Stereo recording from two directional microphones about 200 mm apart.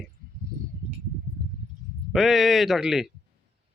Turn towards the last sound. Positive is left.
turn(degrees=0)  # may be behind; listen again after turning